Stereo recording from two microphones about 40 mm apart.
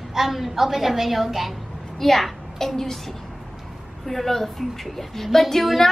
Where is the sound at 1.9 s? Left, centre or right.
Centre.